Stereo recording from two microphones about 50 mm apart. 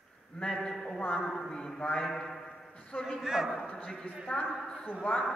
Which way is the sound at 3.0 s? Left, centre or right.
Centre.